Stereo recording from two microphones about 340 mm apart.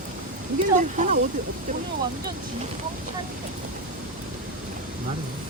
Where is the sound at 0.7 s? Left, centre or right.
Right.